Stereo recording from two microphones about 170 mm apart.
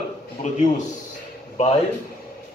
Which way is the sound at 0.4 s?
45° left (ahead or behind).